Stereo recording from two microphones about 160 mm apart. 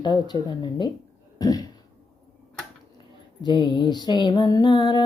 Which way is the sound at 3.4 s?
30° left (ahead or behind).